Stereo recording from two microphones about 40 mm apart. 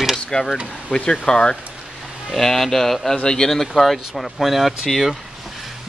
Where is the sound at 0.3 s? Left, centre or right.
Centre.